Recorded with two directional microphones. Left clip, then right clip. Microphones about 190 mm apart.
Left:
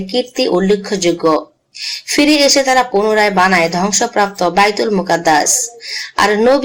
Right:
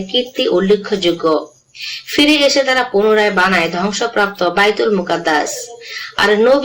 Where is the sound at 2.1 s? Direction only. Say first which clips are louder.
Left 1 dB; 45° left (ahead or behind).